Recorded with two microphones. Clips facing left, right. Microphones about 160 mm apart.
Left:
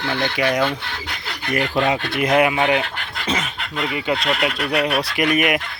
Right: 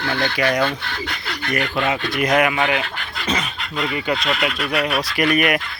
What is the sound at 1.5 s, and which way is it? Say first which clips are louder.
Speech: left 2 dB; 30° left (ahead or behind).